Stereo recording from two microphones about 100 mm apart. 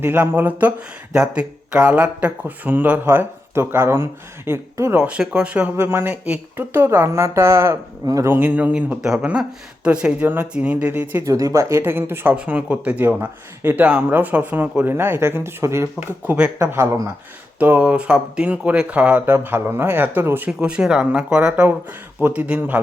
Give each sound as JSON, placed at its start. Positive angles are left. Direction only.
{"t": 0.0, "sound": "speech", "side_deg": -20}
{"t": 1.1, "sound": "speech", "side_deg": -10}
{"t": 4.9, "sound": "speech", "side_deg": -10}
{"t": 5.7, "sound": "speech", "side_deg": -25}
{"t": 8.3, "sound": "speech", "side_deg": -15}
{"t": 11.2, "sound": "speech", "side_deg": -35}
{"t": 20.5, "sound": "speech", "side_deg": -10}